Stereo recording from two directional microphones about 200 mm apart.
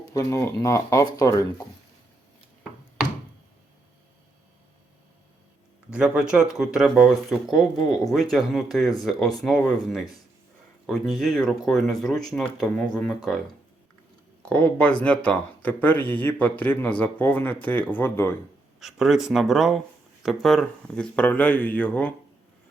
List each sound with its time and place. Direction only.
0.1 s speech: 15° left (ahead or behind)
5.9 s speech: 5° right (ahead or behind)
14.4 s speech: 5° left (ahead or behind)
18.8 s speech: centre (ahead or behind)